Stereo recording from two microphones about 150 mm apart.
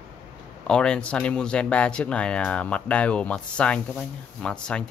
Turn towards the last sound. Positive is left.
turn(degrees=5)  # may be behind; listen again after turning